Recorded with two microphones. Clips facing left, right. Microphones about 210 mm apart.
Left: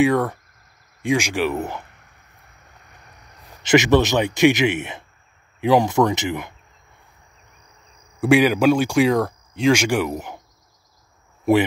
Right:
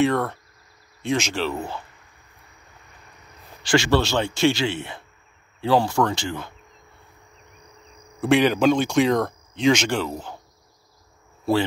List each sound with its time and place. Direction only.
0.0 s speech: 10° left (ahead or behind)
3.6 s a man's voice: 20° left (ahead or behind)
8.2 s speech: 10° left (ahead or behind)